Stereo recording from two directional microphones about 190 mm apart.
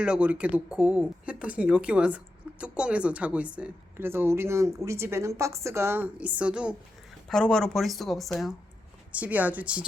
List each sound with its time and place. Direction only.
0.0 s speech: 5° right (ahead or behind)